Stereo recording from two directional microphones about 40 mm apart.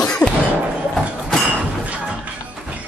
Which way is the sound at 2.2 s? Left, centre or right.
Right.